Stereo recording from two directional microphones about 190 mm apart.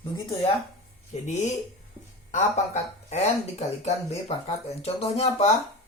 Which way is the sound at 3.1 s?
35° left (ahead or behind).